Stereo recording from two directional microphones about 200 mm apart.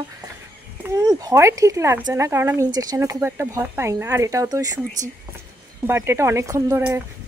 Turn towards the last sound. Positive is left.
turn(degrees=-15)  # may be behind; listen again after turning